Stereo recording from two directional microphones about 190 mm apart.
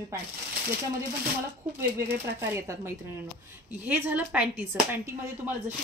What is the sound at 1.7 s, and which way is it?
A woman's voice, 10° right (ahead or behind).